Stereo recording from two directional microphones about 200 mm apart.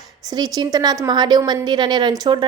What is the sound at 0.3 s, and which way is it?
A woman's voice, 20° right (ahead or behind).